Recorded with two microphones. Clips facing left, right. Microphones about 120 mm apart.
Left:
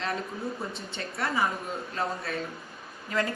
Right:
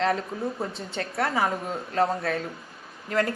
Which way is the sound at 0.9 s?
65° right (ahead or behind).